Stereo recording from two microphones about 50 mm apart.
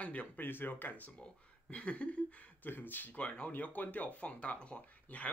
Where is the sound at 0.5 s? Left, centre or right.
Left.